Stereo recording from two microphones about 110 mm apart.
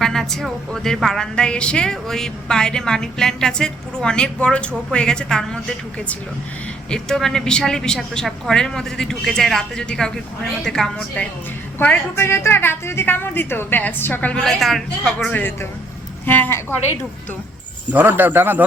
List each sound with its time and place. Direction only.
0.0 s a woman's voice: 5° left (ahead or behind)
6.9 s a woman's voice: 5° left (ahead or behind)
11.8 s a woman's voice: 20° left (ahead or behind)
14.4 s a woman's voice: 5° left (ahead or behind)
15.3 s a woman's voice: 15° left (ahead or behind)
17.9 s a man's voice: 15° right (ahead or behind)